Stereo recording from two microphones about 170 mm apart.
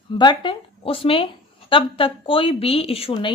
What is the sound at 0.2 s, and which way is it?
A woman's voice, 25° left (ahead or behind).